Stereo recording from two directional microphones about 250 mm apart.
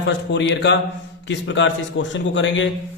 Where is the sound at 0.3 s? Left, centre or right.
Left.